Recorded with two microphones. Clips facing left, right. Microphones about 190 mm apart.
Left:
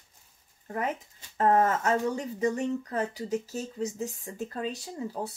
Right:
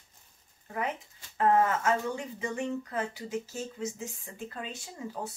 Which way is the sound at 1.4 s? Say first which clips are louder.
Left 2 dB; 40° left (ahead or behind).